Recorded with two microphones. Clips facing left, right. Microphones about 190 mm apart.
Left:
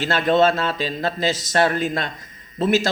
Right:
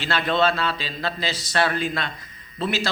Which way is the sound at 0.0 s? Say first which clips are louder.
Left 5 dB; 45° left (ahead or behind).